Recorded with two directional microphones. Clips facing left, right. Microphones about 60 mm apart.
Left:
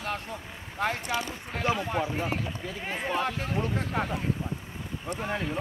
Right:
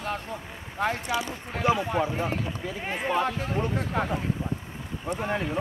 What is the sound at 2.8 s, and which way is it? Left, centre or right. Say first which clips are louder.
Speech: right 3 dB; centre.